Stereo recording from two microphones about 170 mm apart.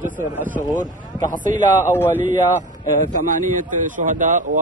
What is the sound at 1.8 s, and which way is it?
Speech, 15° left (ahead or behind).